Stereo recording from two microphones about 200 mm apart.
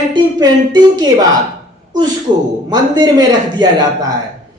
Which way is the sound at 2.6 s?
20° right (ahead or behind).